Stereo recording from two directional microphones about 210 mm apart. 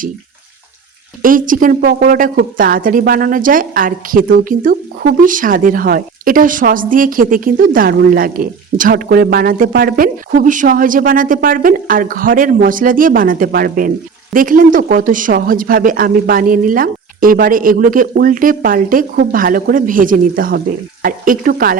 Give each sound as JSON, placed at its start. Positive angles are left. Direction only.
{"t": 1.2, "sound": "a woman's voice", "side_deg": -40}